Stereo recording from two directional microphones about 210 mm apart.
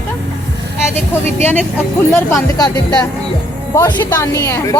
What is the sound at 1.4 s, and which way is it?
A woman's voice, 10° left (ahead or behind).